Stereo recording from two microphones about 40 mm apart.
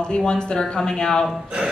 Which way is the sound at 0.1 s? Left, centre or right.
Left.